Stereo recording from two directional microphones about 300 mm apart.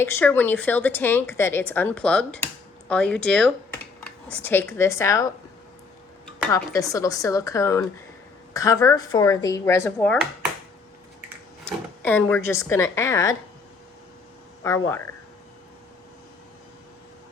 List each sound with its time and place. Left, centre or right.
0.0 s speech: centre
12.0 s speech: centre
14.6 s speech: centre